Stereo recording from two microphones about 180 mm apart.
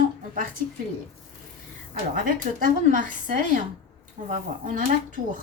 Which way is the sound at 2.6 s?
50° right (ahead or behind).